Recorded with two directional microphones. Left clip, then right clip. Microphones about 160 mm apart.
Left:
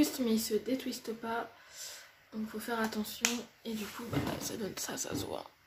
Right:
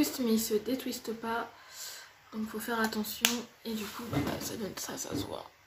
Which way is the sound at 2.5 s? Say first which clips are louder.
Right 3 dB; 10° left (ahead or behind).